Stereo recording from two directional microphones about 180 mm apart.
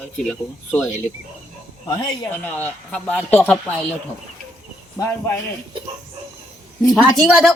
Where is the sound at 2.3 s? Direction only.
10° left (ahead or behind).